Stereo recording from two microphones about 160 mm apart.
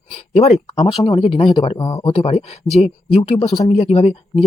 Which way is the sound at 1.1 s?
30° left (ahead or behind).